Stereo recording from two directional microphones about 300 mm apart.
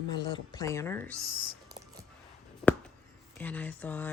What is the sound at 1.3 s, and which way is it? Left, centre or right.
Whispering, right.